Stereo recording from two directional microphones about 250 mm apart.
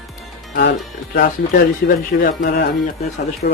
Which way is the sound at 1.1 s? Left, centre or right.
Left.